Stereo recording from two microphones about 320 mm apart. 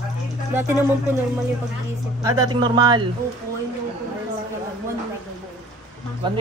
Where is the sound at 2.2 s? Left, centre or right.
Centre.